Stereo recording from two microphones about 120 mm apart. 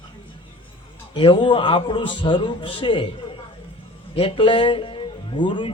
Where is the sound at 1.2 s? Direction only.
45° left (ahead or behind).